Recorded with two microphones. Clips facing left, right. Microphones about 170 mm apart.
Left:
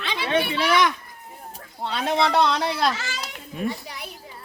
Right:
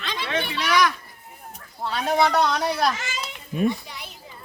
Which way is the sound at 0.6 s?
25° left (ahead or behind).